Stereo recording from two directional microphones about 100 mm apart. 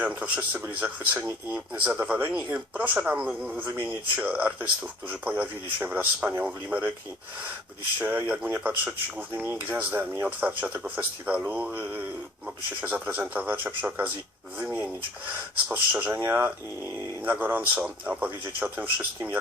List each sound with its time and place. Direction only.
0.0 s speech: 10° right (ahead or behind)
7.9 s speech: 15° right (ahead or behind)
14.6 s a sound: 15° right (ahead or behind)
15.7 s speech: 15° right (ahead or behind)